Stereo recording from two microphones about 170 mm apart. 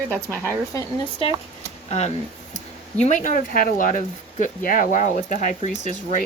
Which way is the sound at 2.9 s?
45° left (ahead or behind).